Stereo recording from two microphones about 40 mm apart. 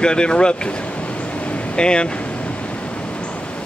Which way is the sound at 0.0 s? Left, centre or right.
Left.